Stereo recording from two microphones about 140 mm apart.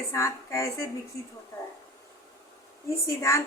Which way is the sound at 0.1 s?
20° left (ahead or behind).